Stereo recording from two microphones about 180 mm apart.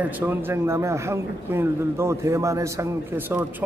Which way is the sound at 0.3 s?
15° right (ahead or behind).